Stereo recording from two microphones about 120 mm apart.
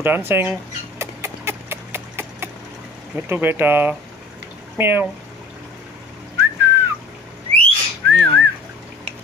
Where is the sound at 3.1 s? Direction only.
15° right (ahead or behind).